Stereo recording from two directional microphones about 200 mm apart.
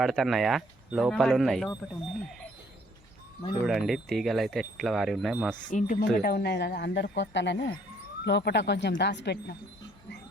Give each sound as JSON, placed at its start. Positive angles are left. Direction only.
{"t": 0.0, "sound": "speech", "side_deg": 0}
{"t": 3.7, "sound": "speech", "side_deg": 0}
{"t": 5.7, "sound": "speech", "side_deg": 40}
{"t": 6.1, "sound": "speech", "side_deg": 50}